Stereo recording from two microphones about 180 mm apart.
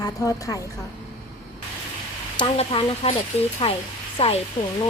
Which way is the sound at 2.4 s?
30° left (ahead or behind).